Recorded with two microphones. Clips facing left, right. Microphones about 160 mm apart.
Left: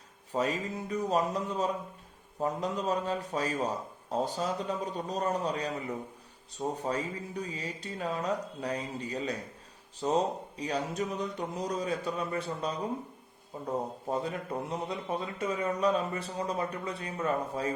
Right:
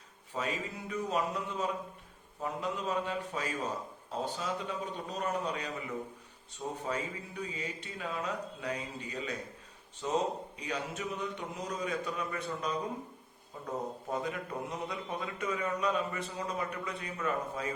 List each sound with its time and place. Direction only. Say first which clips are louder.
0.3 s a man's voice: left 5 dB; 40° left (ahead or behind)